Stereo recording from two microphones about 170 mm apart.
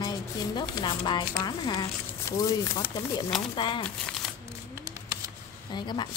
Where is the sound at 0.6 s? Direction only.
25° left (ahead or behind).